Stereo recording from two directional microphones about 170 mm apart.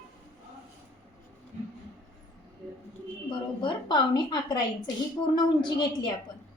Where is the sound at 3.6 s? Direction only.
25° left (ahead or behind).